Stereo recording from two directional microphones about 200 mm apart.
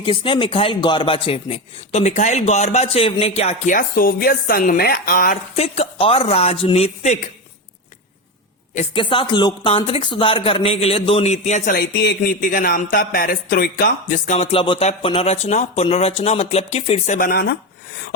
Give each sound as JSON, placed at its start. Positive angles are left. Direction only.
{"t": 0.0, "sound": "speech", "side_deg": 25}
{"t": 5.5, "sound": "speech", "side_deg": 30}
{"t": 8.7, "sound": "speech", "side_deg": 30}
{"t": 17.2, "sound": "speech", "side_deg": 50}